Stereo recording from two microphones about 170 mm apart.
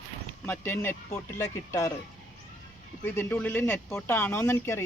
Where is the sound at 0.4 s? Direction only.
10° left (ahead or behind).